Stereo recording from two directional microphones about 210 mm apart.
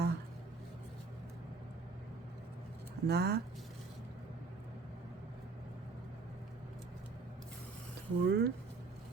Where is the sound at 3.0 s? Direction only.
50° right (ahead or behind).